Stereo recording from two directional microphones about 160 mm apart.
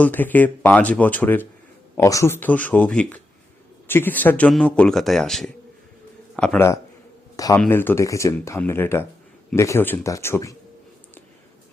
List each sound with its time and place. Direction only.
0.0 s speech: 10° left (ahead or behind)
7.3 s speech: 20° left (ahead or behind)